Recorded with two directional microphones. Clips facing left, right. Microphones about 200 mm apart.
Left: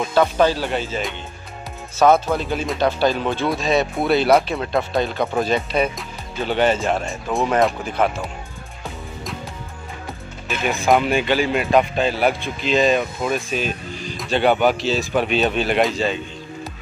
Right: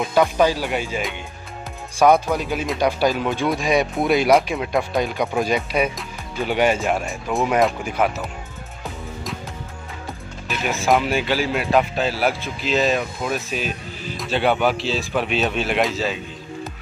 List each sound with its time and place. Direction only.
0.1 s speech: 10° right (ahead or behind)
10.5 s speech: centre (ahead or behind)